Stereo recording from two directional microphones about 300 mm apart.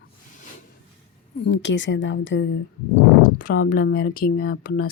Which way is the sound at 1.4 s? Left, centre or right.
Left.